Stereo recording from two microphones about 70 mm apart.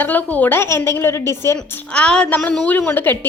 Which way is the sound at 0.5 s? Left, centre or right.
Left.